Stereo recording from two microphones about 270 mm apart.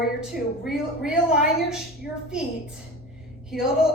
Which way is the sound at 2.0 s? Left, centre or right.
Left.